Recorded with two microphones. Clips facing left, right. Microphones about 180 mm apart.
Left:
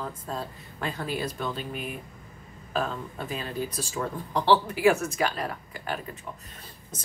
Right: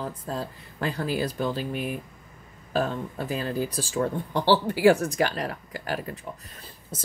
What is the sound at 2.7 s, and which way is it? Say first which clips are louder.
A woman's voice: right 3 dB; 35° right (ahead or behind).